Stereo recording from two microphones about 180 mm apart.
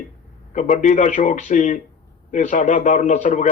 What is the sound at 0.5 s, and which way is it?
A man's voice, 45° left (ahead or behind).